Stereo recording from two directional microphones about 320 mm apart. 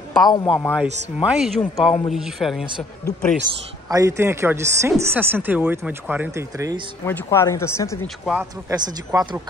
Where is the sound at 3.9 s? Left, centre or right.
Centre.